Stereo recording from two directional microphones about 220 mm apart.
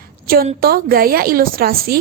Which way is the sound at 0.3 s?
40° right (ahead or behind).